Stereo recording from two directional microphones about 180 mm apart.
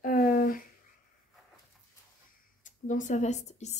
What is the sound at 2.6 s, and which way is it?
A woman's voice, 45° left (ahead or behind).